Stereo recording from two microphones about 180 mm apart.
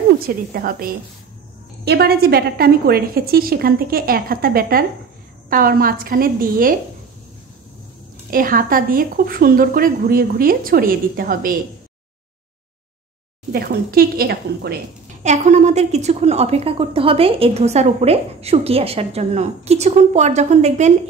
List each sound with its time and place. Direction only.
0.5 s a woman's voice: 55° right (ahead or behind)
8.3 s a woman's voice: 50° right (ahead or behind)
13.5 s a woman's voice: 55° right (ahead or behind)
15.2 s a woman's voice: 40° right (ahead or behind)